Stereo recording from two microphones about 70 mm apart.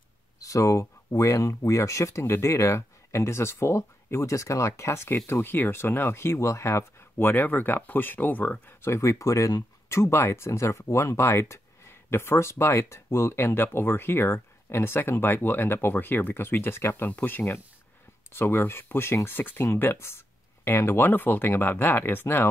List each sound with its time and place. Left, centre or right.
0.4 s speech: left